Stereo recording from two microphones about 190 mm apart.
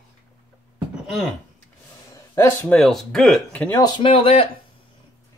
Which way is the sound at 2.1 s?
15° left (ahead or behind).